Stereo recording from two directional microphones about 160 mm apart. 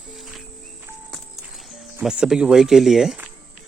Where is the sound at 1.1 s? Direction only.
Centre (ahead or behind).